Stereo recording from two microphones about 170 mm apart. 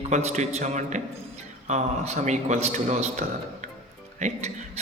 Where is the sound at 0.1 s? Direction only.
40° right (ahead or behind).